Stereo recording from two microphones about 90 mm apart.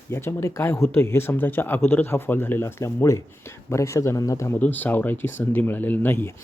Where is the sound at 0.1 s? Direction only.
30° left (ahead or behind).